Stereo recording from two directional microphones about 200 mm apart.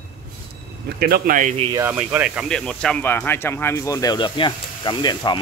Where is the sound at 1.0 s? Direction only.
45° right (ahead or behind).